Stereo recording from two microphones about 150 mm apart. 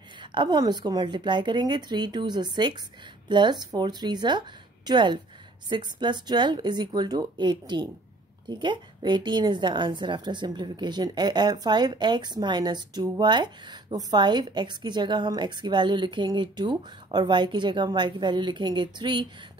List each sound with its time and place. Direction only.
0.2 s a woman's voice: 30° right (ahead or behind)